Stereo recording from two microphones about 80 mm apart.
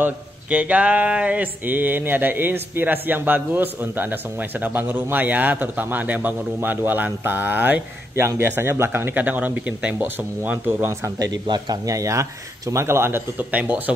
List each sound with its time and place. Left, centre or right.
0.0 s speech: centre
10.9 s a man's voice: right
11.4 s a man's voice: right
11.8 s a man's voice: right; by 13.9 s centre